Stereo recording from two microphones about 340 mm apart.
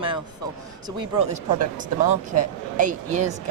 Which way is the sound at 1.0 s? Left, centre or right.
Left.